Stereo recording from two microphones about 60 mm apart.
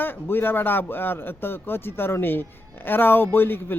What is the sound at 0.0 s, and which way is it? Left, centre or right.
A man's voice, left.